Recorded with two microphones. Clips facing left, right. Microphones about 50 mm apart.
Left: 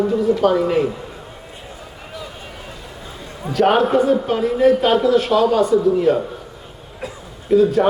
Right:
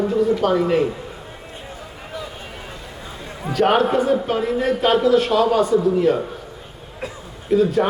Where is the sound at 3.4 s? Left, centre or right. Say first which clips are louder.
Left 2 dB; centre.